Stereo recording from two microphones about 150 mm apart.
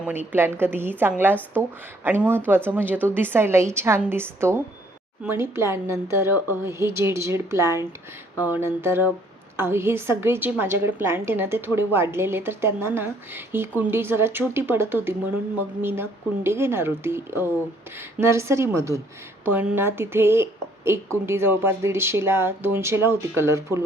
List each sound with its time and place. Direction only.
0.0 s a woman's voice: 10° right (ahead or behind)